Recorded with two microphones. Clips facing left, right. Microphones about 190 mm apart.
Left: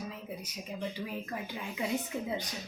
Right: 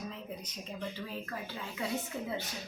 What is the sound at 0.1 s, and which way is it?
Speech, 10° left (ahead or behind).